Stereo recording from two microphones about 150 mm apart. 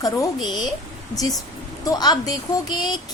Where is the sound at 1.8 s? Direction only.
25° left (ahead or behind).